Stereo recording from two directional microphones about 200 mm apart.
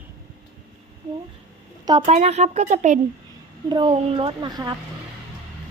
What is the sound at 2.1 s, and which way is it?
Speech, 35° right (ahead or behind).